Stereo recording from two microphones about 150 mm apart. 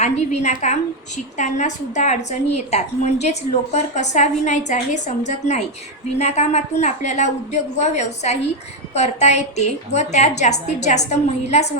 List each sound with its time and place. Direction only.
0.0 s a woman's voice: 50° left (ahead or behind)